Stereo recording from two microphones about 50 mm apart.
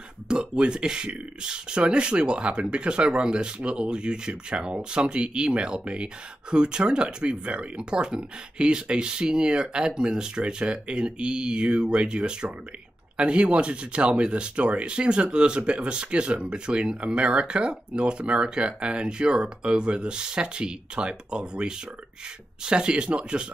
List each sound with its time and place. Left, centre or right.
0.3 s speech: centre